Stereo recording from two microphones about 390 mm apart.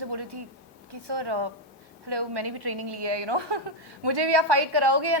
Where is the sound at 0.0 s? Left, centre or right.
Right.